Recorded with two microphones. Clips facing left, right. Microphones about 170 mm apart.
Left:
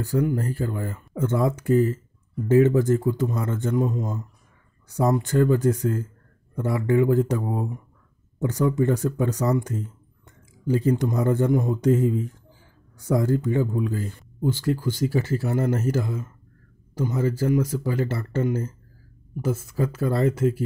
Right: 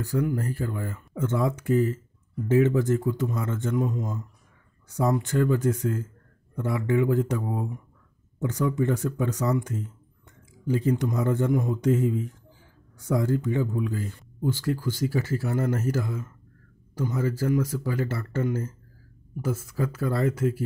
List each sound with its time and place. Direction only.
0.0 s speech: 30° left (ahead or behind)
14.5 s speech: 20° left (ahead or behind)